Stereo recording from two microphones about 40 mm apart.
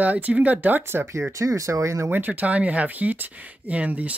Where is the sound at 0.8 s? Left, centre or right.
Right.